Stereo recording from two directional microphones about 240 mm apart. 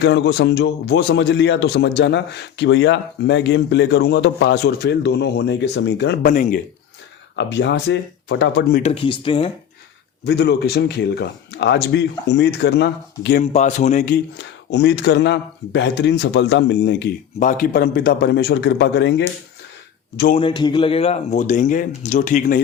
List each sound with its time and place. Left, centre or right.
0.0 s speech: left
6.2 s speech: left
7.3 s speech: left
8.8 s speech: left
10.2 s speech: left
13.4 s speech: left
20.3 s speech: centre